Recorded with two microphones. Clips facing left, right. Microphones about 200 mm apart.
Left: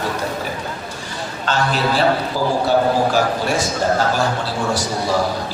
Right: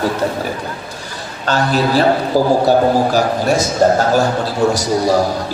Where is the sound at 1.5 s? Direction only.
40° right (ahead or behind).